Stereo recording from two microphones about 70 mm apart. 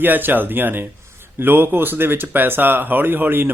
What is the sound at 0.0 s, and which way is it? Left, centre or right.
Speech, right.